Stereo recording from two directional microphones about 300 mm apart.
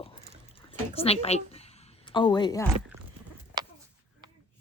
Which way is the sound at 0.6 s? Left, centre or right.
Centre.